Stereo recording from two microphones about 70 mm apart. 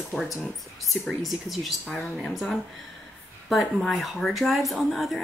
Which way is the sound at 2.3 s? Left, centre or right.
Centre.